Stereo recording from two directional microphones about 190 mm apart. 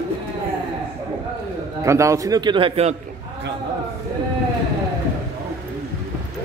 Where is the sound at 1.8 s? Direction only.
15° right (ahead or behind); by 3.0 s 30° right (ahead or behind).